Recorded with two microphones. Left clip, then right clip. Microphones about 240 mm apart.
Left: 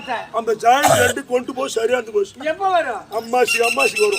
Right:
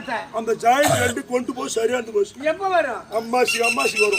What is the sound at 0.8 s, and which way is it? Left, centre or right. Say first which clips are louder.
Speech: left 5 dB; centre.